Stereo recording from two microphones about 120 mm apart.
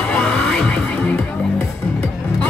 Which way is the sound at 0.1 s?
10° left (ahead or behind).